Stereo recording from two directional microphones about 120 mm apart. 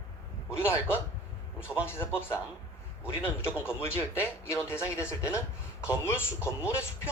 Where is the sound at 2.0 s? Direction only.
20° left (ahead or behind).